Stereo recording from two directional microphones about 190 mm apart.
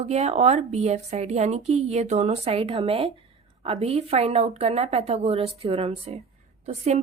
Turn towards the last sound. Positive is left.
turn(degrees=-35)  # may be behind; listen again after turning